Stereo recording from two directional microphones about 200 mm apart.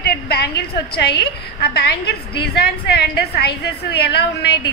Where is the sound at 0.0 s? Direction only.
55° left (ahead or behind).